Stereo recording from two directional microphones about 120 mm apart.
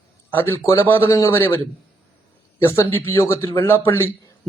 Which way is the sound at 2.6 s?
25° left (ahead or behind).